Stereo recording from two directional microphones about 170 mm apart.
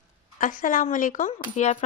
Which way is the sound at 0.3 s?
50° left (ahead or behind).